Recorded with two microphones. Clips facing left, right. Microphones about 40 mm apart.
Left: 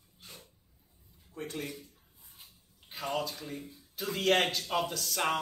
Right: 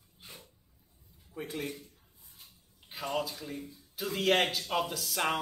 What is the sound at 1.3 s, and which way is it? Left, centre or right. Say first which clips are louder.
Speech: right 1 dB; centre.